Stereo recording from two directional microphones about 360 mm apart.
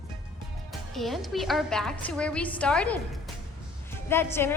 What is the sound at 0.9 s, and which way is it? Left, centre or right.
A woman's voice, centre.